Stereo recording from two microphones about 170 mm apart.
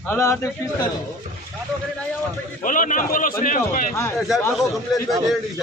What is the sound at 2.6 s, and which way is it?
A man's voice, 50° left (ahead or behind).